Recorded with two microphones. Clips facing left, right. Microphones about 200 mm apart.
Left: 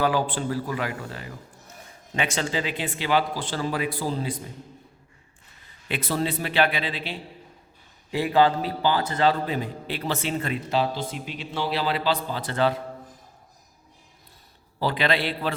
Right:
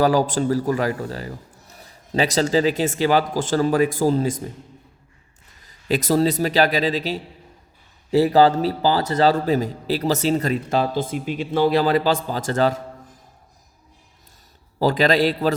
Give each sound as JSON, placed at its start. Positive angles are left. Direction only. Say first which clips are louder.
{"t": 0.0, "sound": "a man's voice", "louder": "right 6 dB", "side_deg": -40}
{"t": 5.6, "sound": "a man's voice", "louder": "right 9 dB", "side_deg": -40}
{"t": 14.8, "sound": "a man's voice", "louder": "right 7 dB", "side_deg": -40}